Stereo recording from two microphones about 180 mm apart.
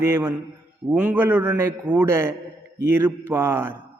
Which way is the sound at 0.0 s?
15° right (ahead or behind).